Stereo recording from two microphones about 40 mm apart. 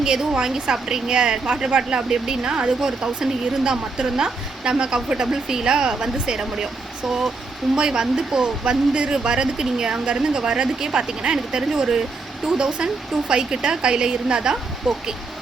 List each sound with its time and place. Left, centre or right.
0.0 s a woman's voice: centre
7.8 s a woman's voice: centre
14.8 s speech: centre